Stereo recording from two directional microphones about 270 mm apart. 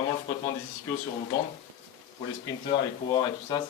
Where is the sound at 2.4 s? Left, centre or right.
Centre.